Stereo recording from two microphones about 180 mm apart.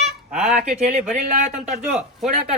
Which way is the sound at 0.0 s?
Centre (ahead or behind).